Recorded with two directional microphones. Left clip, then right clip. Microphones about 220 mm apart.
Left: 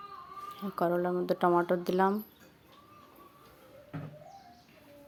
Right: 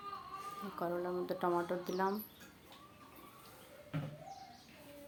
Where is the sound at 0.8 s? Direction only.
35° left (ahead or behind).